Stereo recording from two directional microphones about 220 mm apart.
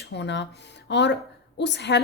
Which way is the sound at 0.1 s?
50° left (ahead or behind).